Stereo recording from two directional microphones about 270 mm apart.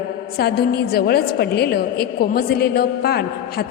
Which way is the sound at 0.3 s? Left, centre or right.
Left.